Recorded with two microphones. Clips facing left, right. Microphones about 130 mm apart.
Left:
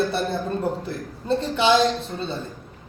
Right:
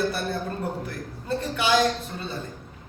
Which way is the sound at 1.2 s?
25° left (ahead or behind).